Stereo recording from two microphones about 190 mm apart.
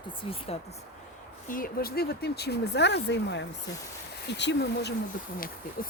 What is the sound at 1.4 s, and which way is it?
Speech, 50° left (ahead or behind).